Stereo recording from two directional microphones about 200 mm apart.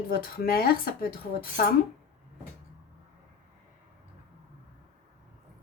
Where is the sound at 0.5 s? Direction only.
50° left (ahead or behind).